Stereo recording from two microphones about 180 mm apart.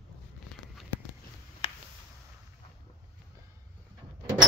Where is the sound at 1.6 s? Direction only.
30° left (ahead or behind).